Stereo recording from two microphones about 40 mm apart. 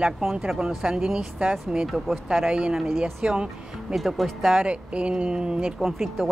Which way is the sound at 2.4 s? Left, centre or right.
Right.